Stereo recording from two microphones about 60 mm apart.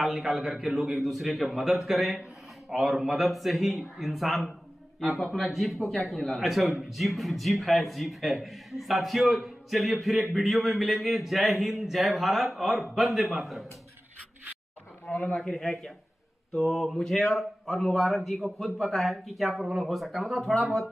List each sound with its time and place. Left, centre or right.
0.0 s speech: centre
15.0 s a sound: left
15.5 s speech: centre